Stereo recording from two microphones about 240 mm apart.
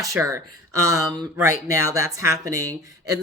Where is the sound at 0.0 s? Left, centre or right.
Centre.